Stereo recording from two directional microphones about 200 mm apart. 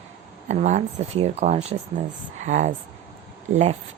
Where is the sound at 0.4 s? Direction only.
35° right (ahead or behind).